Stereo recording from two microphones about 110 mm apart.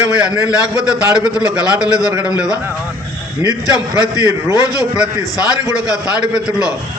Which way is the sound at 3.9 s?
40° left (ahead or behind).